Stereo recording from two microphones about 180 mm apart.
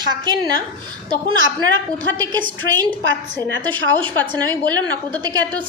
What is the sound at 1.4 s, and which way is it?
Speech, 90° right.